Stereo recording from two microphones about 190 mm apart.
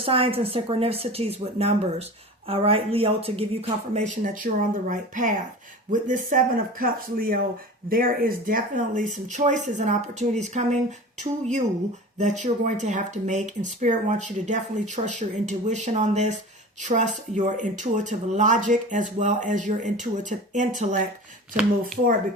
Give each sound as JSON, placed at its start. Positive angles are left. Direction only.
{"t": 0.0, "sound": "speech", "side_deg": -30}